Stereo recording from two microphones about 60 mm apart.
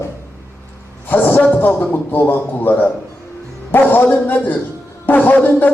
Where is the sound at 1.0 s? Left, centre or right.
Left.